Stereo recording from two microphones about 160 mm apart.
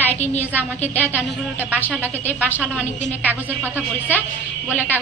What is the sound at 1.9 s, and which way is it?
Speech, 10° right (ahead or behind).